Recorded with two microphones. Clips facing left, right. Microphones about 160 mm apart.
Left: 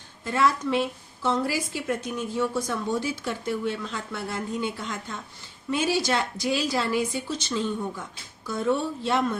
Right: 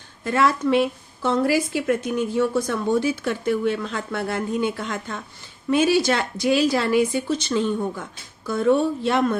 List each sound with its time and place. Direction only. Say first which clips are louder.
0.3 s a woman's voice: right 4 dB; 60° right (ahead or behind)